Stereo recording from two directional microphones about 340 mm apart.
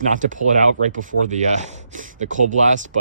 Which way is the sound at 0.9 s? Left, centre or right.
Right.